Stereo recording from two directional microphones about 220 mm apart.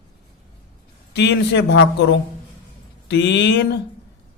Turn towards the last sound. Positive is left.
turn(degrees=55)  # may be behind; listen again after turning